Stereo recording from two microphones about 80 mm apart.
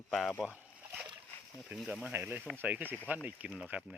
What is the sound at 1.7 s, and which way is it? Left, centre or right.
Speech, right.